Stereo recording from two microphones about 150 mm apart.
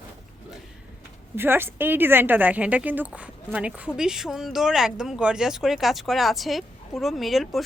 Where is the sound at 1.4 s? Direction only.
15° right (ahead or behind).